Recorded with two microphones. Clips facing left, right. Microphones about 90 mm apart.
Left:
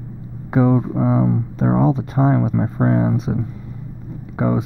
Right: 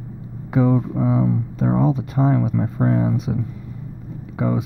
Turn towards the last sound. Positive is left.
turn(degrees=35)  # may be behind; listen again after turning